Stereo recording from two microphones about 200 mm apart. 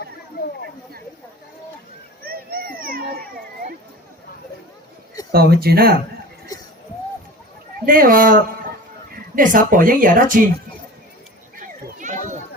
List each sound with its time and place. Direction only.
2.2 s a sound: 50° right (ahead or behind)
5.3 s speech: 50° right (ahead or behind)
7.9 s speech: 45° right (ahead or behind)
11.6 s children playing: 40° right (ahead or behind)